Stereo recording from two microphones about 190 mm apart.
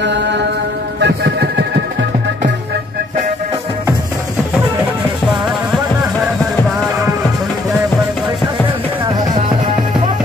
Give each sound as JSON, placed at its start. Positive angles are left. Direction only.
{"t": 0.0, "sound": "mantra", "side_deg": -65}
{"t": 1.0, "sound": "music", "side_deg": -65}